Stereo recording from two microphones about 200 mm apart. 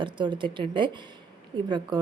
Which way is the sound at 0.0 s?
25° right (ahead or behind).